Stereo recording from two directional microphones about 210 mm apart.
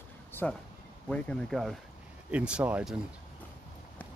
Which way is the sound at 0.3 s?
10° left (ahead or behind).